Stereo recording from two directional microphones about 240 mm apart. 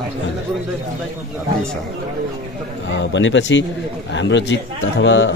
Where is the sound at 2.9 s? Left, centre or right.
Left.